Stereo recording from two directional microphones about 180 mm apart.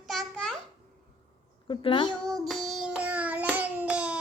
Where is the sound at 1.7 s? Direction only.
25° left (ahead or behind).